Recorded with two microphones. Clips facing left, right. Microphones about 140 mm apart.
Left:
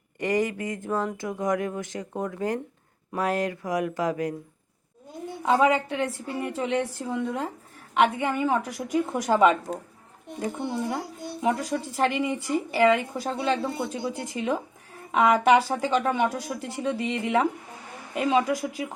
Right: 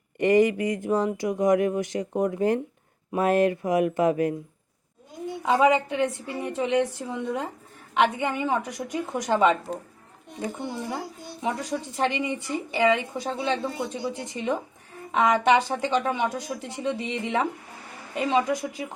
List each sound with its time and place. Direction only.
0.2 s speech: 20° right (ahead or behind)
5.5 s speech: 5° right (ahead or behind)
11.4 s speech: centre (ahead or behind)